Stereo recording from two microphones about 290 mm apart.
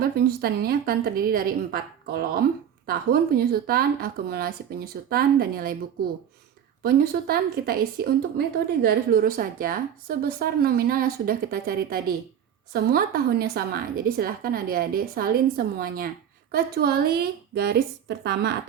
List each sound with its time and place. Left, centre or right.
0.0 s a woman's voice: right
6.8 s a woman's voice: right